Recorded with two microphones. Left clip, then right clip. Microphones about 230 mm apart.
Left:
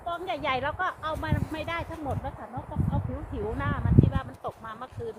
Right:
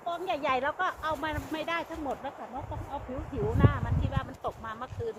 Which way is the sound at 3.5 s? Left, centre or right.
Centre.